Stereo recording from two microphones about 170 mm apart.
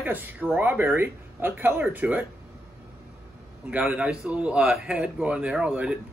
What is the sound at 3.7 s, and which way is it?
Speech, 10° right (ahead or behind).